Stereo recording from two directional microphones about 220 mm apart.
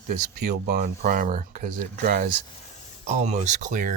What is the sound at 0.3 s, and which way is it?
Speech, 45° right (ahead or behind).